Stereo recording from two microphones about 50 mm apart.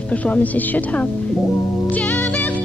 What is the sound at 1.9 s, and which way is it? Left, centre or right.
Music, left.